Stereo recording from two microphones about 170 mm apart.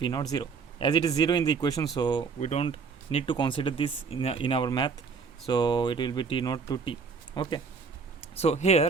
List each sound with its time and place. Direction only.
0.0 s speech: 25° left (ahead or behind)
2.4 s speech: 35° left (ahead or behind)